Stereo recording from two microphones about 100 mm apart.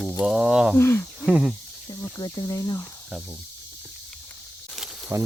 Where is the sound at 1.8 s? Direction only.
40° left (ahead or behind).